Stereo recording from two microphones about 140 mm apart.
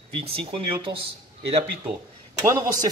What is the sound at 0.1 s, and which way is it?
Speech, 40° right (ahead or behind).